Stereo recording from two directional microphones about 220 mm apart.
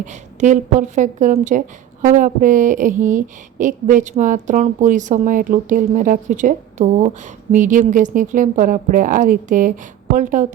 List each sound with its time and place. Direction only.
0.0 s a woman's voice: 35° right (ahead or behind)